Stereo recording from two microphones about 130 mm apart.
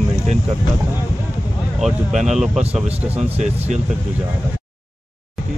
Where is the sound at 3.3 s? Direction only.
60° right (ahead or behind).